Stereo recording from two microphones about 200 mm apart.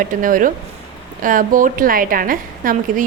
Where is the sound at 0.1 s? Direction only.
40° right (ahead or behind).